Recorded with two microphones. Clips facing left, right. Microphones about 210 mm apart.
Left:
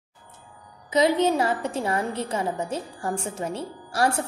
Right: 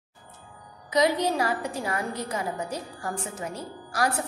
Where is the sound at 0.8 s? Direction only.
25° left (ahead or behind).